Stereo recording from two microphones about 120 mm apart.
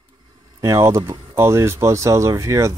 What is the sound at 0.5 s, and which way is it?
Speech, 30° right (ahead or behind).